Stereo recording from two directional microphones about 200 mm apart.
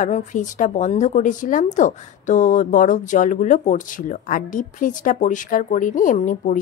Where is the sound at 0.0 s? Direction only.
40° left (ahead or behind).